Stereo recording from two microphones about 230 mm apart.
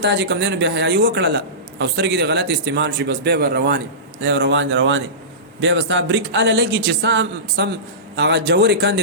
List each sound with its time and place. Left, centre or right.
0.0 s speech: right